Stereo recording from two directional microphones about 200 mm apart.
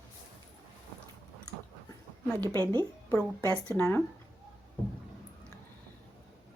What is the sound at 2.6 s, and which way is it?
Speech, 15° right (ahead or behind).